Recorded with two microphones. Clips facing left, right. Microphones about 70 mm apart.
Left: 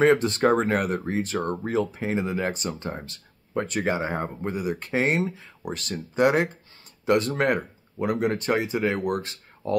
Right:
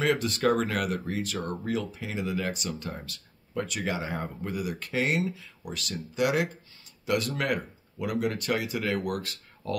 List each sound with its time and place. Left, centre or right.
0.0 s speech: left